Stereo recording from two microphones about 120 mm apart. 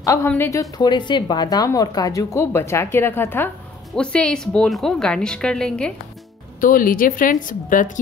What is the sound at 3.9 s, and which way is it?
A woman's voice, 10° left (ahead or behind).